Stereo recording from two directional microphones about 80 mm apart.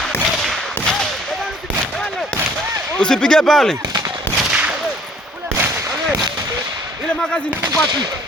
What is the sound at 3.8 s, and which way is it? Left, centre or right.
Gunshot, right.